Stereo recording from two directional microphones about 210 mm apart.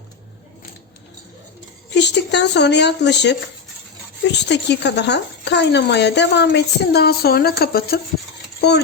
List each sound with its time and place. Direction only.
1.9 s speech: 55° left (ahead or behind)